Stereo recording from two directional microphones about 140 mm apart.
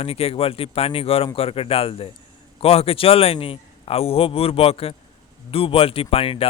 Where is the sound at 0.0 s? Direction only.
45° left (ahead or behind).